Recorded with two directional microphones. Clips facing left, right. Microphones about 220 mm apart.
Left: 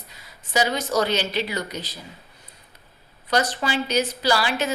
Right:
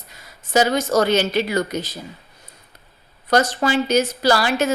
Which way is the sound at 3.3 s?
45° right (ahead or behind).